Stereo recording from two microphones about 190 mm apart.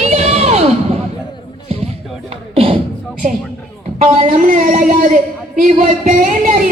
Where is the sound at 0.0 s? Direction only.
35° right (ahead or behind).